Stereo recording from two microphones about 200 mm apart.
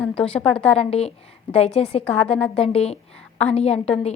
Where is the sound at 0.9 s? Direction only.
30° left (ahead or behind).